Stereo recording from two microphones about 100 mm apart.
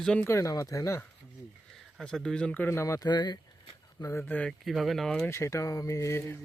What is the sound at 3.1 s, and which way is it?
Speech, 45° left (ahead or behind).